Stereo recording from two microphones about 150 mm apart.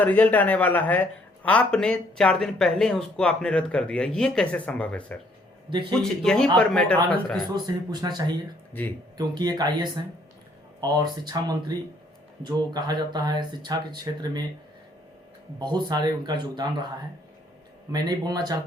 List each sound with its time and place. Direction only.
0.0 s speech: 10° left (ahead or behind)
7.5 s speech: 30° right (ahead or behind)
15.5 s speech: 30° right (ahead or behind)
17.9 s speech: 30° right (ahead or behind)